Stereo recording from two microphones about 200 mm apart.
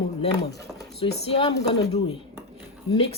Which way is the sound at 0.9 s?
30° left (ahead or behind).